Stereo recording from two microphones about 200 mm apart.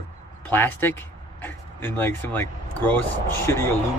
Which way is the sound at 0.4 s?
10° left (ahead or behind).